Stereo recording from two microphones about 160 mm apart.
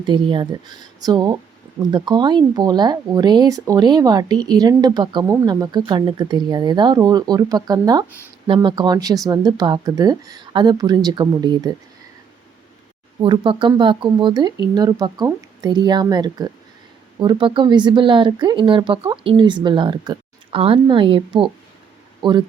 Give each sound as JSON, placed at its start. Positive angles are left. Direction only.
{"t": 0.0, "sound": "speech", "side_deg": -30}
{"t": 13.2, "sound": "speech", "side_deg": -30}